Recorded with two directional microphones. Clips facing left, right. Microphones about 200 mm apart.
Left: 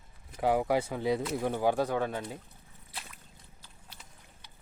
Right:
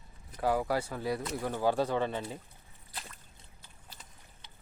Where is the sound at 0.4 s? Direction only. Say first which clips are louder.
Left 3 dB; 20° left (ahead or behind).